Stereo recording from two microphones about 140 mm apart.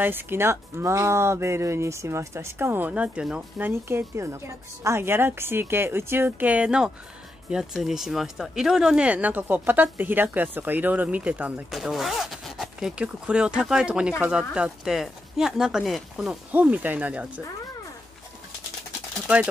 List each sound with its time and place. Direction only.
0.0 s speech: 15° right (ahead or behind)